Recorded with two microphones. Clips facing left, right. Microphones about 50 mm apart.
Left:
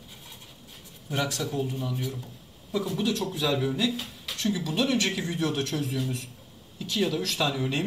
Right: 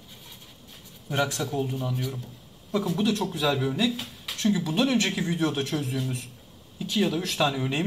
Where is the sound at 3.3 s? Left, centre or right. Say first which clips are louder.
Right 1 dB; centre.